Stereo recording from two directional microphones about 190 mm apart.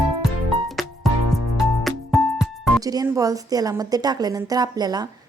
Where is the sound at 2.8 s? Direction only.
20° right (ahead or behind).